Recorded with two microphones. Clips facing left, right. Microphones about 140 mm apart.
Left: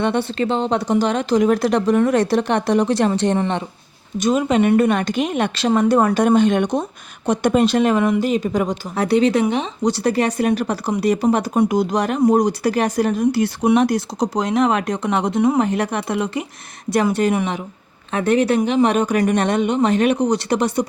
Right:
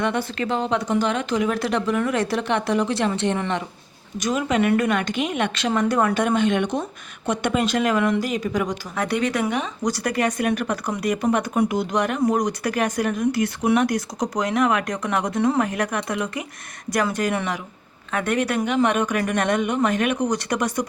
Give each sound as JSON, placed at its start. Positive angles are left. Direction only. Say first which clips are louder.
{"t": 0.0, "sound": "speech", "louder": "left 4 dB", "side_deg": 30}
{"t": 3.3, "sound": "speech", "louder": "left 4 dB", "side_deg": 25}
{"t": 15.4, "sound": "speech", "louder": "left 4 dB", "side_deg": 15}
{"t": 15.6, "sound": "speech", "louder": "left 4 dB", "side_deg": 30}